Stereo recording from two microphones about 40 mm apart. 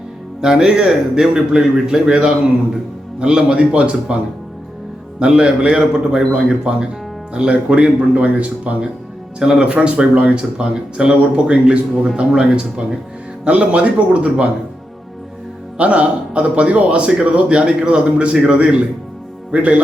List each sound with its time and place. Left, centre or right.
0.4 s a man's voice: centre
5.2 s speech: right
9.4 s speech: right
13.4 s speech: right
15.8 s speech: right